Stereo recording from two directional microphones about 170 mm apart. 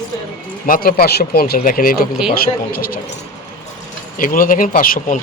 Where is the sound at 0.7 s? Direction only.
60° left (ahead or behind).